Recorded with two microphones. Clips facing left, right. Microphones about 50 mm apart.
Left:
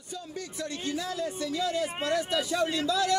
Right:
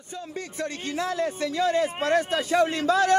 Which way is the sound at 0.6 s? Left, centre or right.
Right.